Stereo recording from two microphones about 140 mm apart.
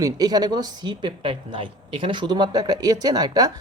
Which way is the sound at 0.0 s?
30° right (ahead or behind).